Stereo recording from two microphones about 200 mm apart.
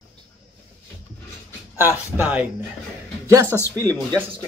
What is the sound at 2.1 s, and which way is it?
Speech, 10° right (ahead or behind).